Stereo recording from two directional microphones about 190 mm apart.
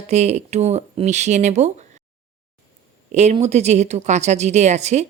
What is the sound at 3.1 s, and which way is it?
A woman's voice, 35° right (ahead or behind).